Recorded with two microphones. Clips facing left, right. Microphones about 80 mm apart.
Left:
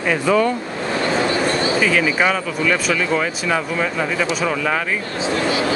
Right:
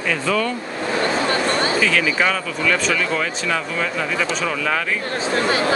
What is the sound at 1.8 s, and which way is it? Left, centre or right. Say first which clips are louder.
Speech: left 2 dB; centre.